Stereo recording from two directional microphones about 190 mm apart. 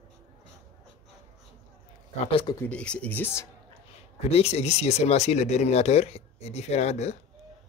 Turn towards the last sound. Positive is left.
turn(degrees=35)  # may be behind; listen again after turning